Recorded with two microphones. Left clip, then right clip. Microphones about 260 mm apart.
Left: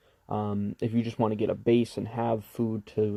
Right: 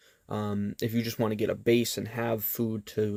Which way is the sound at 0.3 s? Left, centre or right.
Right.